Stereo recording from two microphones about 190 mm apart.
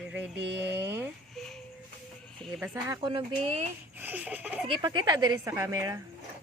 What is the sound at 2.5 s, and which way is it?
Speech, 10° right (ahead or behind).